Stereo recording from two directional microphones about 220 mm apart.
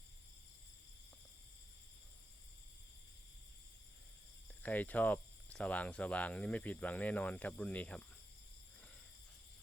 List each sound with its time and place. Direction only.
4.6 s cricket: 5° left (ahead or behind)